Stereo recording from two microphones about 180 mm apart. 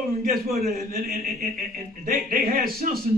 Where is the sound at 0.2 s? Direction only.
55° right (ahead or behind).